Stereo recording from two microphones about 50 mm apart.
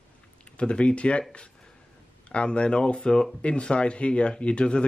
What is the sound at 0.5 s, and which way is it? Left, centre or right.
Speech, left.